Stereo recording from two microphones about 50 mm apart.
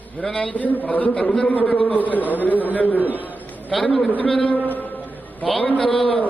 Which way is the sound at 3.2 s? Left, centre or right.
Left.